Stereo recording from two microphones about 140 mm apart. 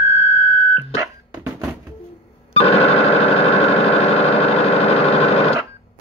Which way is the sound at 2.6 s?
45° left (ahead or behind).